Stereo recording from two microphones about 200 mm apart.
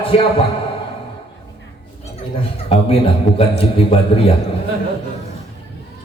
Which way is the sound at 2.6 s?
30° left (ahead or behind).